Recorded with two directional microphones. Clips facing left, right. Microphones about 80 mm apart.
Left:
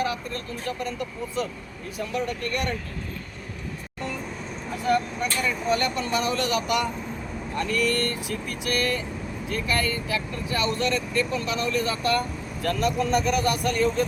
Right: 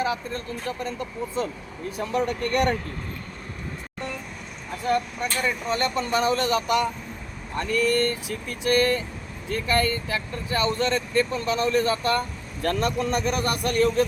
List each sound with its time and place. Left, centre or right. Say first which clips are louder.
0.0 s speech: right 1 dB; right
2.1 s speech: right 5 dB; right
4.9 s speech: left 1 dB; right
7.6 s speech: right 3 dB; centre; by 14.0 s right